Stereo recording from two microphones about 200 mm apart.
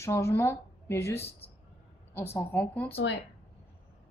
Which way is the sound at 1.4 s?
30° left (ahead or behind).